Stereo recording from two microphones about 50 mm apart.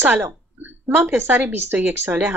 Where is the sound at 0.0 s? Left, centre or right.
Right.